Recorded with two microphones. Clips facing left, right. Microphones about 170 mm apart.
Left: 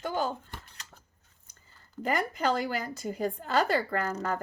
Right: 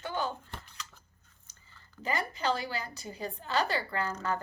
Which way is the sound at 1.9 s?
50° left (ahead or behind).